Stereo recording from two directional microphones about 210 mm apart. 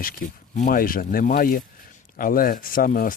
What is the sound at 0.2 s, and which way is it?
Speech, 40° left (ahead or behind).